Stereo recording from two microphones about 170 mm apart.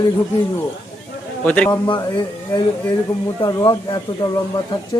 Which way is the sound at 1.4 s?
10° left (ahead or behind).